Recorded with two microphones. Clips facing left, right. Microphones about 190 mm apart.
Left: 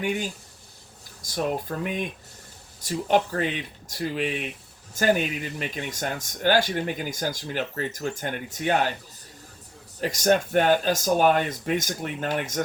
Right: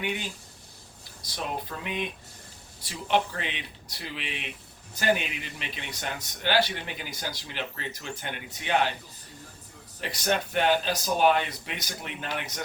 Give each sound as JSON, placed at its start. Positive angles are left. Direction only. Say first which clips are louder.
{"t": 0.0, "sound": "speech", "louder": "left 5 dB", "side_deg": 45}
{"t": 10.0, "sound": "speech", "louder": "left 7 dB", "side_deg": 45}